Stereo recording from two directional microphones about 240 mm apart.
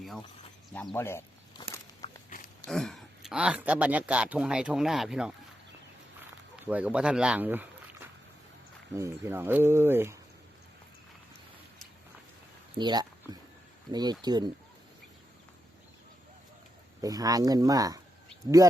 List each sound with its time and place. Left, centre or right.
0.7 s a sound: centre
2.0 s walk: left
2.6 s speech: centre
6.7 s speech: centre
12.7 s speech: centre
17.0 s speech: centre